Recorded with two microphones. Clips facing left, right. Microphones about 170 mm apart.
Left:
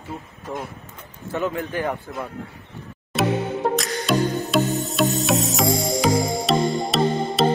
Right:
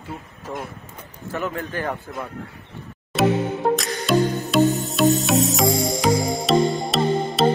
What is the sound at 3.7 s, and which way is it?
Music, centre (ahead or behind).